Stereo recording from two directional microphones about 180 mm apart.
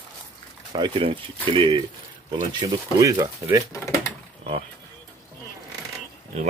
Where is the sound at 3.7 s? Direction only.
15° left (ahead or behind).